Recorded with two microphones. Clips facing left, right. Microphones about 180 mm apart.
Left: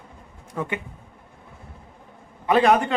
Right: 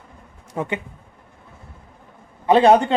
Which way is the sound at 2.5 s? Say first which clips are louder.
Right 4 dB; 30° right (ahead or behind).